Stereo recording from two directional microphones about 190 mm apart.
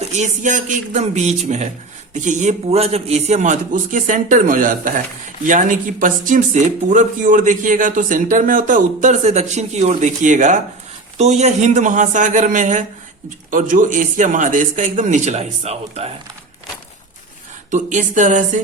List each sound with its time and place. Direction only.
0.1 s a man's voice: 40° right (ahead or behind)
17.7 s a man's voice: 40° right (ahead or behind)